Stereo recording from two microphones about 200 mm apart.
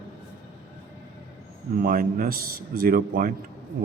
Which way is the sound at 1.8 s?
45° right (ahead or behind).